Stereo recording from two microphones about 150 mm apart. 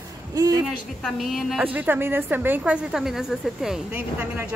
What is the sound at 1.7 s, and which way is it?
A woman's voice, 15° right (ahead or behind).